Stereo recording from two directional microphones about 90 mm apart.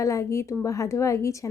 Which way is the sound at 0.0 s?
35° left (ahead or behind).